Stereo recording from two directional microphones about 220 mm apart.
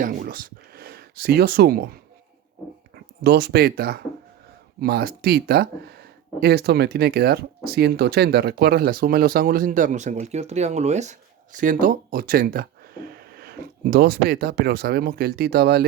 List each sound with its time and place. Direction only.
0.0 s speech: 40° right (ahead or behind)